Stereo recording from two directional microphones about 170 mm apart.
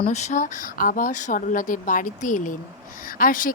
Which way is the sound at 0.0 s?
40° left (ahead or behind).